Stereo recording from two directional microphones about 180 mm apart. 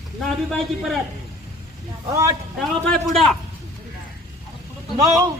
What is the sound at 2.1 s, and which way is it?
Speech, 15° right (ahead or behind).